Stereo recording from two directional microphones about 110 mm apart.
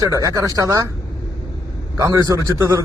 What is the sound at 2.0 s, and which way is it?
Speech, 30° right (ahead or behind).